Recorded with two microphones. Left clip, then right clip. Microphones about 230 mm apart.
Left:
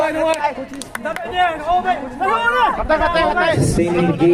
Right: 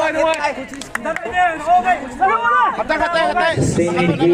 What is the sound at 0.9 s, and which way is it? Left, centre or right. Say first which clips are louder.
Speech: right 1 dB; left.